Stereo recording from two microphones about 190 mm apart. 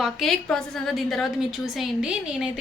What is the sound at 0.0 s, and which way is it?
A woman's voice, centre (ahead or behind).